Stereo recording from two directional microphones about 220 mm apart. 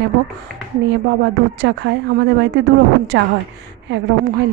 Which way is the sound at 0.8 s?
55° right (ahead or behind).